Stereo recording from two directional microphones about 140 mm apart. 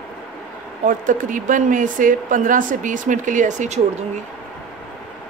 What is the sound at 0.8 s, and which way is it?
Speech, 70° right (ahead or behind).